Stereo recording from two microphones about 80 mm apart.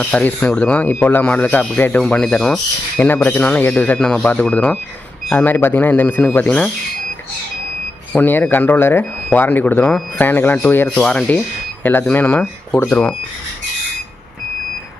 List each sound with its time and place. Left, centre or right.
0.0 s speech: centre
8.1 s speech: left
10.9 s speech: centre
11.8 s speech: left